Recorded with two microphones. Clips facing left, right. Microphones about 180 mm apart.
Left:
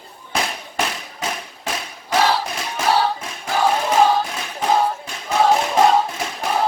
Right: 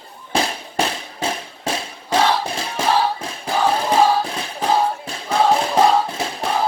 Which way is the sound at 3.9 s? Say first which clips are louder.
Right 1 dB; 30° right (ahead or behind).